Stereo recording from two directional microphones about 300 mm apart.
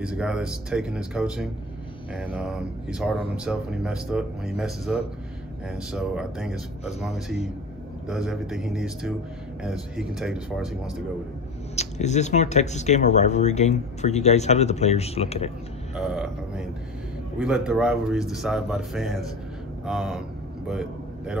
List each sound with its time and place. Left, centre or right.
0.0 s speech: centre
11.7 s speech: left
15.9 s speech: centre
19.9 s a sound: centre